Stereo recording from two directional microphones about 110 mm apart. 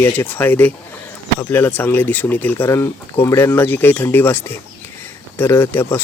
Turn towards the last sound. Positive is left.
turn(degrees=20)  # may be behind; listen again after turning